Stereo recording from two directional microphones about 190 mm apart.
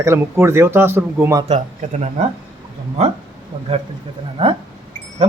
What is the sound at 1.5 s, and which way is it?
Speech, 35° right (ahead or behind).